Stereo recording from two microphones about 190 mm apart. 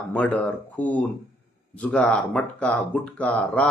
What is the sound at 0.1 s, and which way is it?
Speech, 10° left (ahead or behind).